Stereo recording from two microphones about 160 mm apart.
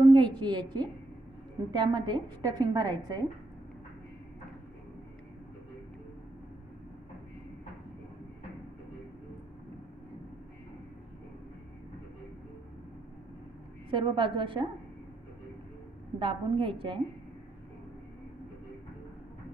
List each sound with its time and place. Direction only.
0.1 s a woman's voice: 30° right (ahead or behind)
13.8 s a woman's voice: 30° right (ahead or behind)
16.2 s a woman's voice: 35° right (ahead or behind)